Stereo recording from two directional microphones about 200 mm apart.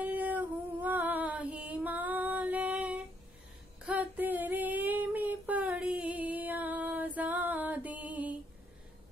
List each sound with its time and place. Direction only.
0.0 s female singing: 10° right (ahead or behind)
3.8 s child singing: 10° right (ahead or behind)